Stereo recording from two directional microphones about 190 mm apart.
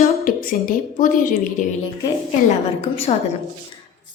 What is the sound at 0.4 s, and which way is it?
Speech, 45° left (ahead or behind).